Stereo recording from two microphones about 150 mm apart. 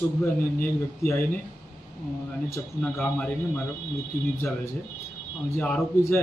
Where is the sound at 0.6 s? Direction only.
15° left (ahead or behind).